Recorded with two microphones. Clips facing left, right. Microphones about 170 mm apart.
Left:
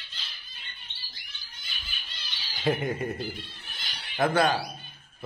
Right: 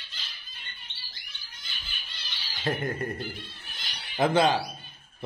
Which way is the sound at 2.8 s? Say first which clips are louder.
Left 1 dB; 5° left (ahead or behind).